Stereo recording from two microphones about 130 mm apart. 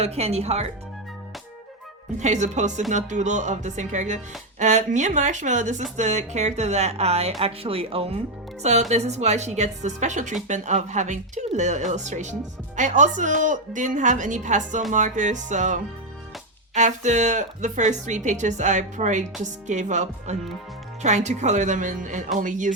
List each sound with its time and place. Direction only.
0.0 s speech: 55° right (ahead or behind)
2.1 s speech: 65° right (ahead or behind); by 8.2 s 50° right (ahead or behind)
8.9 s speech: 60° right (ahead or behind); by 22.7 s 75° right (ahead or behind)